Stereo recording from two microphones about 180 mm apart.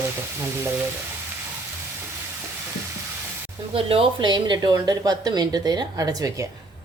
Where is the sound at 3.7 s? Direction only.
30° right (ahead or behind).